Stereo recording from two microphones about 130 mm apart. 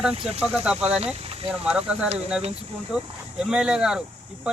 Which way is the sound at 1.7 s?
5° right (ahead or behind).